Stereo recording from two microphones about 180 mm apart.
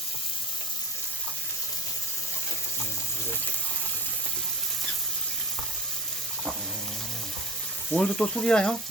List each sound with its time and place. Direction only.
7.9 s speech: 5° left (ahead or behind)